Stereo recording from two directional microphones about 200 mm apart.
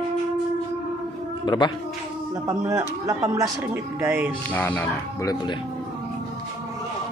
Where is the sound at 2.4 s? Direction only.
15° right (ahead or behind).